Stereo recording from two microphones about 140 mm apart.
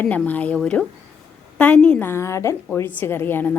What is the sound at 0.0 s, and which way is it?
A woman's voice, 10° left (ahead or behind).